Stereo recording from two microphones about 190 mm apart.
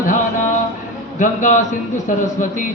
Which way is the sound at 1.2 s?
40° left (ahead or behind).